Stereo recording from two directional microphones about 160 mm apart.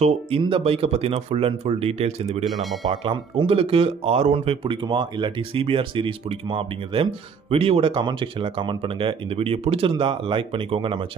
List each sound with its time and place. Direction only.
0.0 s speech: 35° right (ahead or behind)
2.4 s speech: centre (ahead or behind)
2.9 s speech: 30° right (ahead or behind)